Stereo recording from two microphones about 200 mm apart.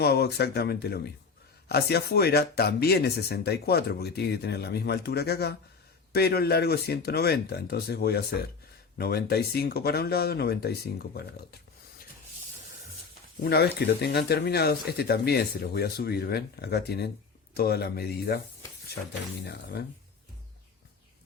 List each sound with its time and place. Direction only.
0.0 s speech: 50° left (ahead or behind)
13.4 s speech: 55° left (ahead or behind)